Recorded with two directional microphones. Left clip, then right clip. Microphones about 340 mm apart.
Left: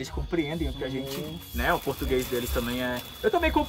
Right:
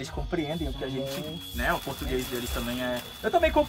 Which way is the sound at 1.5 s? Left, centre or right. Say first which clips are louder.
Left 2 dB; centre.